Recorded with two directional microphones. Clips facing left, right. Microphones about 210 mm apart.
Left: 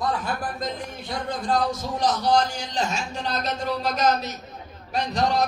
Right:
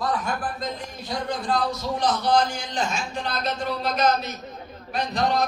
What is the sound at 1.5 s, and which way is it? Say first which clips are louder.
Speech: left 1 dB; 45° left (ahead or behind).